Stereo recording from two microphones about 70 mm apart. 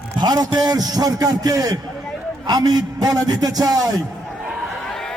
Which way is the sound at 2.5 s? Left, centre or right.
Right.